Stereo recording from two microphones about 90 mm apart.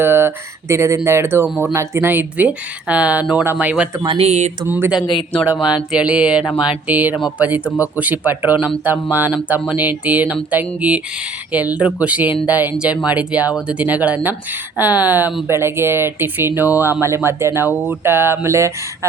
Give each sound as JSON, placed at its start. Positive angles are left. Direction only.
{"t": 0.0, "sound": "speech", "side_deg": -25}
{"t": 4.9, "sound": "speech", "side_deg": 60}
{"t": 5.6, "sound": "speech", "side_deg": -10}